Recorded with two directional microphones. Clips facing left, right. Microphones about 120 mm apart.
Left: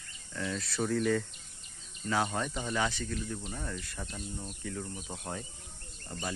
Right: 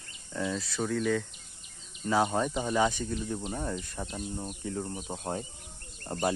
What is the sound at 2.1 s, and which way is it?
Speech, 15° right (ahead or behind).